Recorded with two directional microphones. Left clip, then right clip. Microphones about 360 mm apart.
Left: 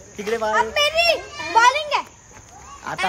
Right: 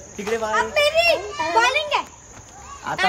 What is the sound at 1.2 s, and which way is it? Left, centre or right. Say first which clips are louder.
Children playing: right 5 dB; right.